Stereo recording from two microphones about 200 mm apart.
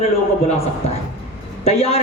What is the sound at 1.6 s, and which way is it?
Speech, 30° left (ahead or behind).